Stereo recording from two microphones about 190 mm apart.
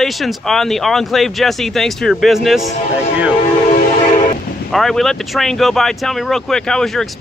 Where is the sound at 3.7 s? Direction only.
40° left (ahead or behind).